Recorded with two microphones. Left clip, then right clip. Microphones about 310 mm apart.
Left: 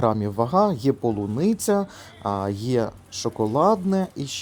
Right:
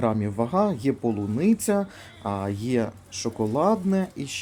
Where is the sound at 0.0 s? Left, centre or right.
Centre.